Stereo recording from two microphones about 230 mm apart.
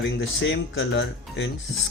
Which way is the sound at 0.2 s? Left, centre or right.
Left.